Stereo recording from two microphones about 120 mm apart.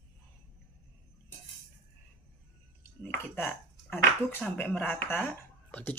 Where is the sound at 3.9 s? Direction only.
15° left (ahead or behind).